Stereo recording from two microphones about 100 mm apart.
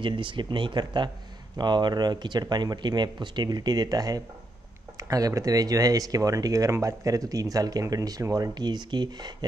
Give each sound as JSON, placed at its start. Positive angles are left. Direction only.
{"t": 0.0, "sound": "speech", "side_deg": -55}